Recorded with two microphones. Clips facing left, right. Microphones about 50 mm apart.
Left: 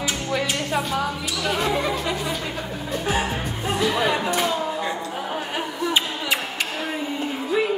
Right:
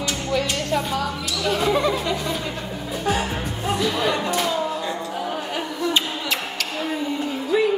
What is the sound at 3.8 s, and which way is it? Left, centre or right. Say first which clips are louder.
Chatter: left 2 dB; centre.